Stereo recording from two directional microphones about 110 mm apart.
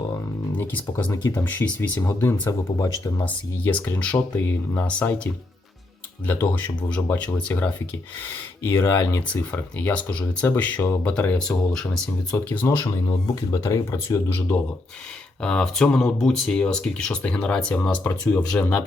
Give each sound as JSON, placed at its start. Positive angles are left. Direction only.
{"t": 0.5, "sound": "speech", "side_deg": 20}
{"t": 2.0, "sound": "speech", "side_deg": 25}
{"t": 3.2, "sound": "speech", "side_deg": 15}
{"t": 6.2, "sound": "speech", "side_deg": 15}
{"t": 9.2, "sound": "speech", "side_deg": 15}
{"t": 13.1, "sound": "speech", "side_deg": 30}